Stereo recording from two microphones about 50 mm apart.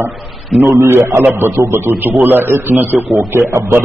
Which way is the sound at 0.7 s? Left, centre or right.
Right.